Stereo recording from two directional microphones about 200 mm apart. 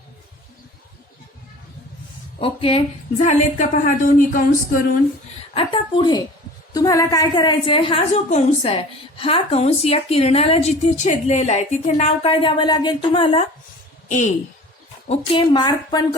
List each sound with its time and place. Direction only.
2.4 s a woman's voice: 25° left (ahead or behind); by 4.9 s 45° left (ahead or behind)
5.5 s a woman's voice: 25° left (ahead or behind)